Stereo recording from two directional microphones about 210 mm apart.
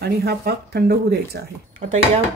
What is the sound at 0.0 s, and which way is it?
Speech, 50° right (ahead or behind).